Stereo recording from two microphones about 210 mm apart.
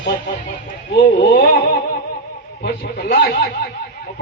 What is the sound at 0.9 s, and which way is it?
Speech, 55° left (ahead or behind).